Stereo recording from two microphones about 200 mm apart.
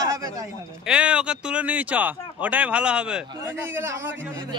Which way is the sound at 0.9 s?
5° right (ahead or behind).